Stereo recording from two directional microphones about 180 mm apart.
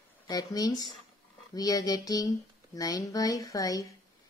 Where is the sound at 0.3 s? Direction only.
20° left (ahead or behind).